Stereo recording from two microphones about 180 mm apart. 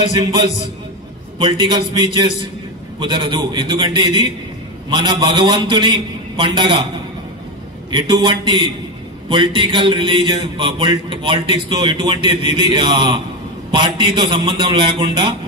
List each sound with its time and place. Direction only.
0.2 s speech: 25° right (ahead or behind)
7.9 s speech: 25° right (ahead or behind)